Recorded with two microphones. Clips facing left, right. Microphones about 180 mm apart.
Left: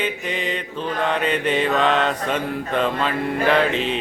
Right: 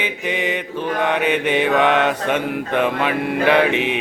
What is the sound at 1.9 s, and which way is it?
Mantra, 65° right (ahead or behind).